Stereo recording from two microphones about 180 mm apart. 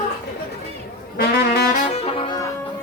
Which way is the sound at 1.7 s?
35° left (ahead or behind).